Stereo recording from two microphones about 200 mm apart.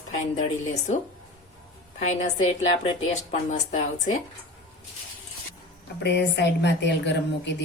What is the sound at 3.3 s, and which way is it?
Speech, 35° left (ahead or behind).